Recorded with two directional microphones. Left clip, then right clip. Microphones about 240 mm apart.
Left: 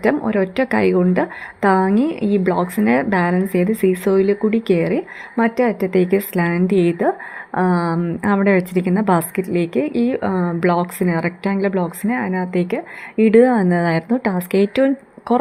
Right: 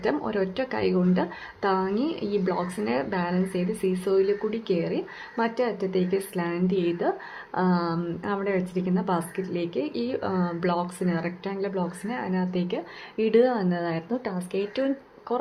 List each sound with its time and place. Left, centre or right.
0.0 s a woman's voice: left